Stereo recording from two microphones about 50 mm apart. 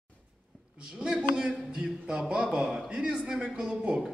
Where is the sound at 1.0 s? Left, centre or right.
Centre.